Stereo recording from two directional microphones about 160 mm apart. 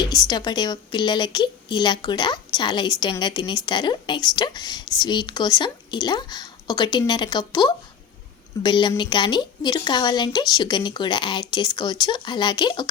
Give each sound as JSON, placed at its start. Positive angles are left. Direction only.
{"t": 0.0, "sound": "a woman's voice", "side_deg": 25}